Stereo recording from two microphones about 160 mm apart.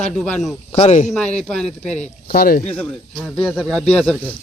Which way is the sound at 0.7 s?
40° left (ahead or behind).